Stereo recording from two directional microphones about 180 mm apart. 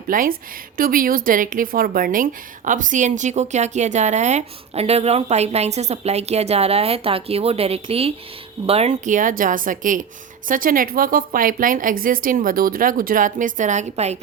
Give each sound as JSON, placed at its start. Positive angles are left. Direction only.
{"t": 0.1, "sound": "a woman's voice", "side_deg": -50}